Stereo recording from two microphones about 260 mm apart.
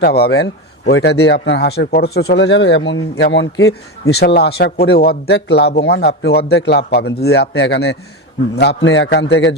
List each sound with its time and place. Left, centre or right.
0.0 s a man's voice: left